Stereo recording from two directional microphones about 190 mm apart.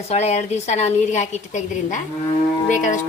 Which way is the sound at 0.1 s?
35° left (ahead or behind).